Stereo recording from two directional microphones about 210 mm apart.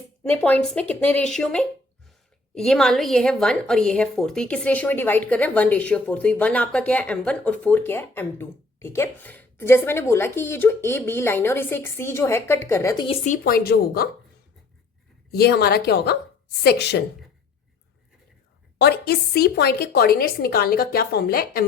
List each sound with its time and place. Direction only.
0.2 s a woman's voice: 5° left (ahead or behind)
13.2 s speech: 40° left (ahead or behind)
15.3 s speech: 50° left (ahead or behind)
18.8 s speech: 50° left (ahead or behind)